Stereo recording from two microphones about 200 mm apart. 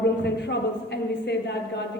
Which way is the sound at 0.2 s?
60° left (ahead or behind).